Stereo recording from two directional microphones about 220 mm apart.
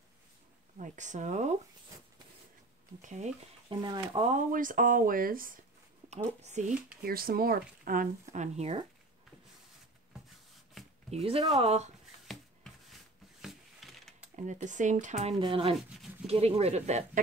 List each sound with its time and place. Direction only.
0.7 s speech: 35° right (ahead or behind)
3.0 s speech: 35° right (ahead or behind)
3.6 s speech: 20° right (ahead or behind)
7.0 s speech: 40° right (ahead or behind)
11.1 s speech: 25° right (ahead or behind)
13.4 s a sound: centre (ahead or behind)
14.3 s speech: 35° right (ahead or behind)